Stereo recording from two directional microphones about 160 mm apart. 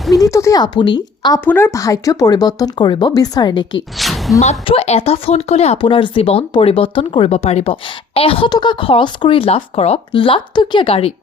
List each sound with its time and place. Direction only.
0.2 s speech: 20° left (ahead or behind)
1.5 s speech: 15° left (ahead or behind)
3.9 s a sound: centre (ahead or behind)
4.4 s speech: 40° left (ahead or behind)